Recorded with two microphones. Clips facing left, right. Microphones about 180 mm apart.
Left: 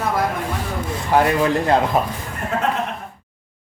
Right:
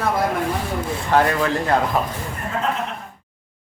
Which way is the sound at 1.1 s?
15° left (ahead or behind).